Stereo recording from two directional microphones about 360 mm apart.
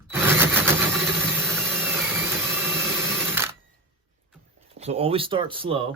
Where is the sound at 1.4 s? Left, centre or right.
Centre.